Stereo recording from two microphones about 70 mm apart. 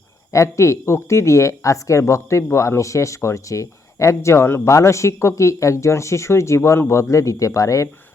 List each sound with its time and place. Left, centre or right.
0.3 s speech: left